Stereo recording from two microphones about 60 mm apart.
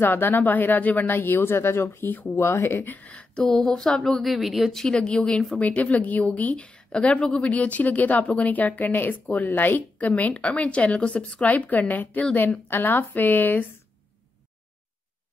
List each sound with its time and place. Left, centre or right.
0.0 s speech: left
2.3 s speech: left
2.9 s speech: left; by 4.8 s centre
4.8 s speech: centre
5.6 s a woman's voice: left